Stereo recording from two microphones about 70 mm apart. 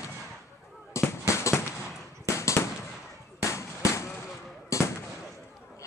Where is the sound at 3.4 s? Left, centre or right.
Left.